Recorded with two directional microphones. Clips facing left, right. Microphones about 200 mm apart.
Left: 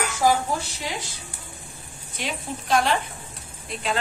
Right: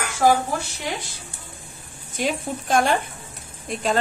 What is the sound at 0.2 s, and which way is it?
Speech, 55° right (ahead or behind).